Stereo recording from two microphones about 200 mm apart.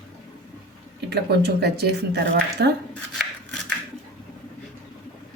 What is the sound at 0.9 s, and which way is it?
Speech, 55° right (ahead or behind).